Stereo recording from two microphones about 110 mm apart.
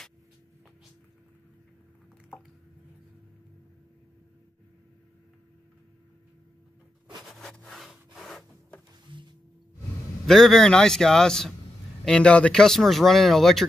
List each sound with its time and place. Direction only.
7.2 s wood: 5° left (ahead or behind)
9.1 s music: 50° right (ahead or behind)
10.2 s speech: 5° left (ahead or behind)